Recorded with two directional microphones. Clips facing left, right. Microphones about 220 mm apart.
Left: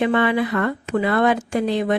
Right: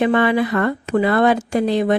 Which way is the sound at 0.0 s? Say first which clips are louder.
Right 2 dB; 40° right (ahead or behind).